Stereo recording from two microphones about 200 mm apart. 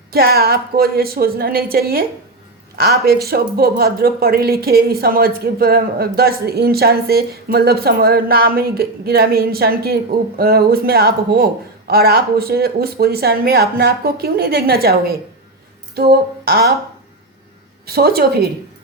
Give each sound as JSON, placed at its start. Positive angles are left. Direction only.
{"t": 0.1, "sound": "speech", "side_deg": -50}
{"t": 17.8, "sound": "speech", "side_deg": -50}